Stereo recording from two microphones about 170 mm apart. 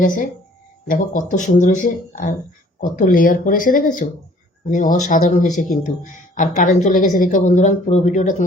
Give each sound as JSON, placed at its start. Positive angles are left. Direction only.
{"t": 0.0, "sound": "a woman's voice", "side_deg": 50}